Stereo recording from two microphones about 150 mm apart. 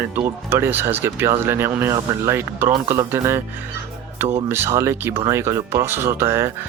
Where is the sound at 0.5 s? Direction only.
15° right (ahead or behind).